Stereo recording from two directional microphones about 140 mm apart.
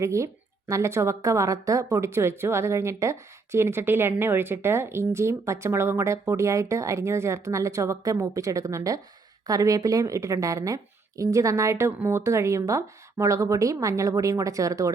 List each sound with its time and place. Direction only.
0.0 s speech: 20° right (ahead or behind)